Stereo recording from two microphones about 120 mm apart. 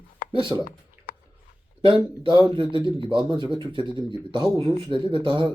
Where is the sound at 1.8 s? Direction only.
45° right (ahead or behind).